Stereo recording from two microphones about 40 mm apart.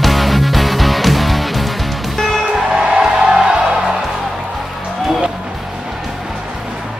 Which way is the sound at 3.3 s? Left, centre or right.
Centre.